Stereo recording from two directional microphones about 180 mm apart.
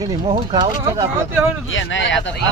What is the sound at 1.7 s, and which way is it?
Speech, 90° left.